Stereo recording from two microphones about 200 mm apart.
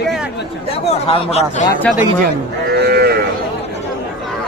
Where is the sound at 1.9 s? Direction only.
5° left (ahead or behind).